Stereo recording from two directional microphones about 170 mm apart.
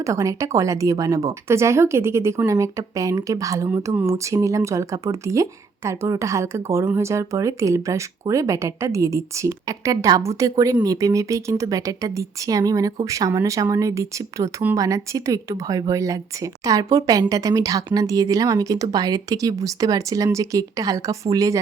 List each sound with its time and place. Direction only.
0.0 s speech: 20° right (ahead or behind)